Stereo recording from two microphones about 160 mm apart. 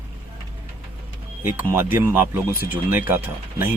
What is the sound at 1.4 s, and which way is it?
Speech, 15° right (ahead or behind).